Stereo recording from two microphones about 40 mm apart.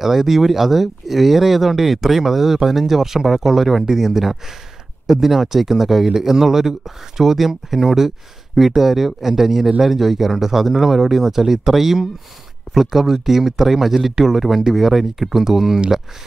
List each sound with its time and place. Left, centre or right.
0.0 s speech: centre